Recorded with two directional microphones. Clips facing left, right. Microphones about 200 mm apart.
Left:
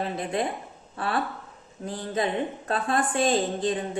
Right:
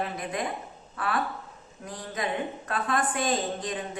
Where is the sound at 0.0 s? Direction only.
30° left (ahead or behind).